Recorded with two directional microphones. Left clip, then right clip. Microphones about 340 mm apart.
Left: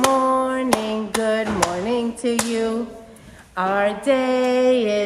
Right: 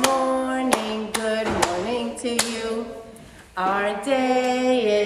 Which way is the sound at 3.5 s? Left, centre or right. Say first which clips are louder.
Left 2 dB; left.